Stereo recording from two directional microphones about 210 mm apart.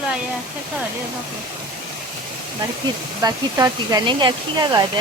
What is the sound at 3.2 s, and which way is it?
Speech, 15° right (ahead or behind).